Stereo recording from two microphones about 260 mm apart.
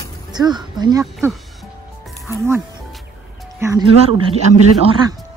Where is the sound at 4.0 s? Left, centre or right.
Right.